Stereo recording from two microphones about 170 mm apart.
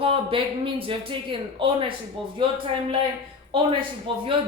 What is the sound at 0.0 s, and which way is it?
A man's voice, 30° right (ahead or behind).